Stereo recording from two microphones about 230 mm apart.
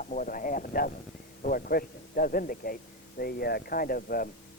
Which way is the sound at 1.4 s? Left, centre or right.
Left.